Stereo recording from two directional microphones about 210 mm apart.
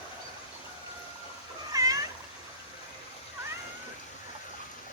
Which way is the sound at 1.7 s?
15° right (ahead or behind).